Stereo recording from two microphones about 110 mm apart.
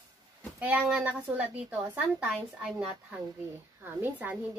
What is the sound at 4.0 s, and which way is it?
Speech, 15° right (ahead or behind).